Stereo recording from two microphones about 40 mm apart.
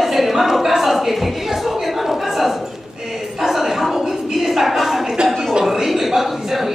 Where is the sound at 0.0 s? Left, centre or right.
Centre.